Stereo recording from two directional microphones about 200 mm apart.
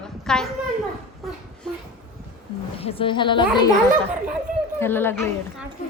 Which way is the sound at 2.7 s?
30° left (ahead or behind).